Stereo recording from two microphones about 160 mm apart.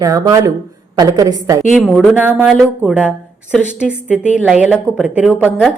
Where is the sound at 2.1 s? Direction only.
10° right (ahead or behind).